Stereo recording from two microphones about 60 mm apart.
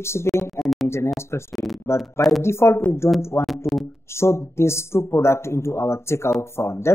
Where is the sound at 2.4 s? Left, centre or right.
Left.